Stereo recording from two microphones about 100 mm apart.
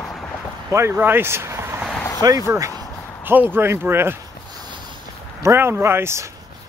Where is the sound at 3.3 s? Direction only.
20° right (ahead or behind).